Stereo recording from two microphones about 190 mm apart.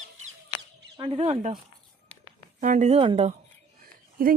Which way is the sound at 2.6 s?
40° right (ahead or behind).